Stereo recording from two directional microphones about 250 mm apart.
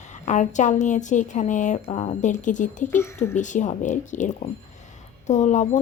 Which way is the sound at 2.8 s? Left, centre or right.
Centre.